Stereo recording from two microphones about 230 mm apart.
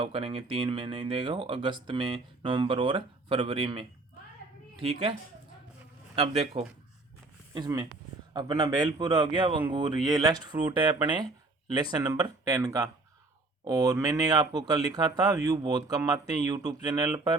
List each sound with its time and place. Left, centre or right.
0.0 s speech: right
6.1 s speech: right